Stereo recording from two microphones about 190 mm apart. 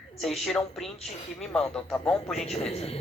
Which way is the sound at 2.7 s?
35° left (ahead or behind).